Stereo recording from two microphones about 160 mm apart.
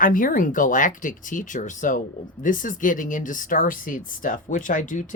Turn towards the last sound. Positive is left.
turn(degrees=55)  # may be behind; listen again after turning